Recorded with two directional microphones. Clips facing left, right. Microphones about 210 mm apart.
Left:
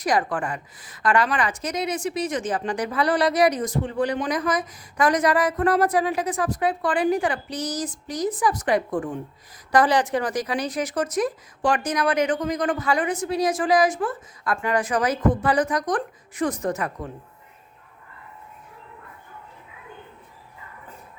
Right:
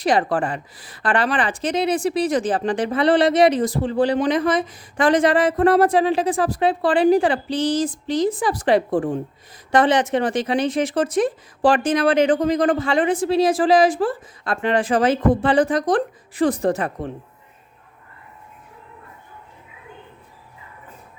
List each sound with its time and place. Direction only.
0.0 s speech: 30° right (ahead or behind)